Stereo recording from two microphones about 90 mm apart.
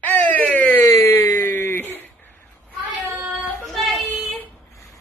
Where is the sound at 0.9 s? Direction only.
30° left (ahead or behind).